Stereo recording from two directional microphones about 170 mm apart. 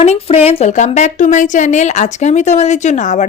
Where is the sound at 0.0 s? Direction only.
40° left (ahead or behind).